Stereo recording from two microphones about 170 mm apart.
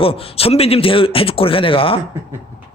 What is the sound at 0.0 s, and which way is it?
A man's voice, 35° left (ahead or behind).